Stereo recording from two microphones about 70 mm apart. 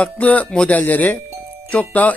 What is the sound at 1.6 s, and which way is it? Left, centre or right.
Speech, centre.